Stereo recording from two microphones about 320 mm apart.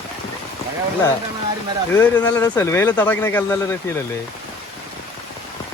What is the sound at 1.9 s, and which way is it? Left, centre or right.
Speech, centre.